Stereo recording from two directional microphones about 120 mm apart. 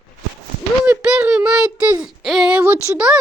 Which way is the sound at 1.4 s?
10° right (ahead or behind).